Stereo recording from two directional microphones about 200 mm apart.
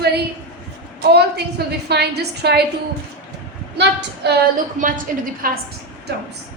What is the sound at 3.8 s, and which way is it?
Speech, 60° right (ahead or behind).